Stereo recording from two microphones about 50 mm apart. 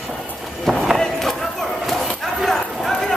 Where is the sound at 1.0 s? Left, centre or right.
Centre.